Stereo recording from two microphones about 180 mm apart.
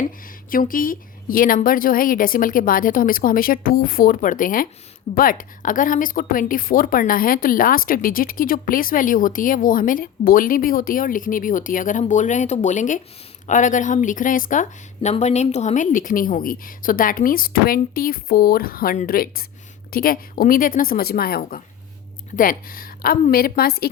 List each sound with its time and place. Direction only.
0.5 s a woman's voice: 50° left (ahead or behind)